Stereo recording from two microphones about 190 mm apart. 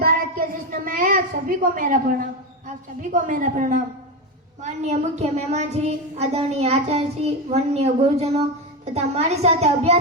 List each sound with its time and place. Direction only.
0.0 s a woman's voice: 45° right (ahead or behind)
3.0 s a woman's voice: 45° right (ahead or behind)